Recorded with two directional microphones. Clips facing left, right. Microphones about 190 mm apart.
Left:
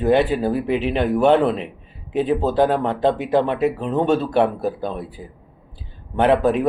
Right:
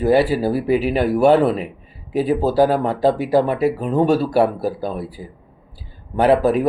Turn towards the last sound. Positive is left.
turn(degrees=-5)  # may be behind; listen again after turning